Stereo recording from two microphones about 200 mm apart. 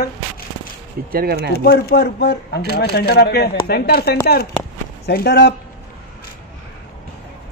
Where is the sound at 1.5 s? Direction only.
55° left (ahead or behind).